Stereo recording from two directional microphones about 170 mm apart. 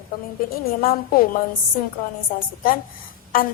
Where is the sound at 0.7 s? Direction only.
60° left (ahead or behind).